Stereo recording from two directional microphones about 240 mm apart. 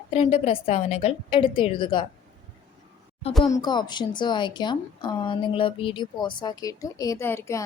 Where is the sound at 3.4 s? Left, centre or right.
Centre.